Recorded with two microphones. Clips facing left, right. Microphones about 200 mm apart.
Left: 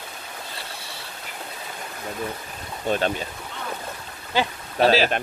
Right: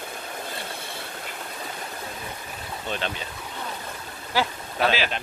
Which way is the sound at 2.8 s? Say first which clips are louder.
Left 8 dB; 45° left (ahead or behind).